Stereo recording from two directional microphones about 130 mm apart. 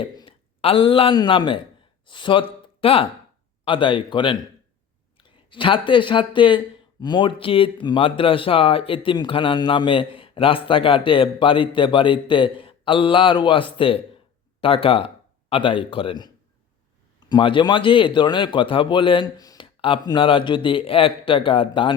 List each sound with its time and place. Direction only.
0.0 s a sound: 45° left (ahead or behind)
1.1 s a man's voice: 35° left (ahead or behind)
20.1 s a man's voice: 40° left (ahead or behind)